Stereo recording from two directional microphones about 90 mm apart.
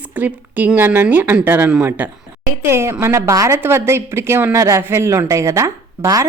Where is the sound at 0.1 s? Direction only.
20° right (ahead or behind).